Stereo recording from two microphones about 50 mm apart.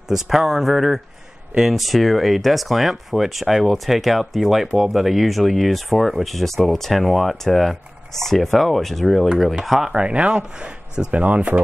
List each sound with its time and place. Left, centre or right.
0.1 s speech: centre
9.9 s speech: right